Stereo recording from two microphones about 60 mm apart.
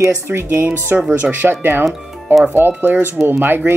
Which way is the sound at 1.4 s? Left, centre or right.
Centre.